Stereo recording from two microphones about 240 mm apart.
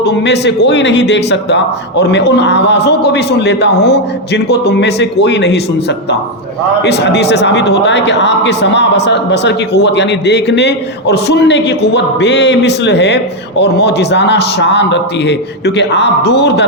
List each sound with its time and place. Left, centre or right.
0.1 s a man's voice: left
6.8 s a man's voice: left